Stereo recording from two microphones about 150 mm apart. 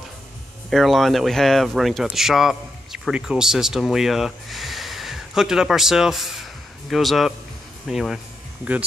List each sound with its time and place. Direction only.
0.7 s speech: centre (ahead or behind)